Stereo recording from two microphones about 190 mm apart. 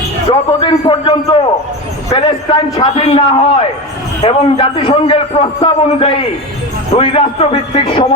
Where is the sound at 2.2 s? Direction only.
25° left (ahead or behind).